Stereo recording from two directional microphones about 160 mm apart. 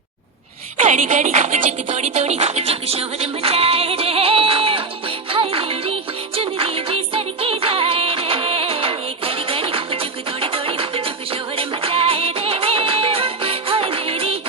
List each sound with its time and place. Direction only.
0.8 s speech: 55° right (ahead or behind)
1.9 s music: 45° right (ahead or behind)